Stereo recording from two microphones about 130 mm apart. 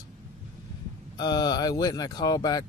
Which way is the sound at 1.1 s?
30° left (ahead or behind).